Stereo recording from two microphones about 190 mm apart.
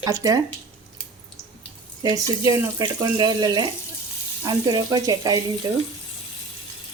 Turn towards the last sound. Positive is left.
turn(degrees=-15)  # may be behind; listen again after turning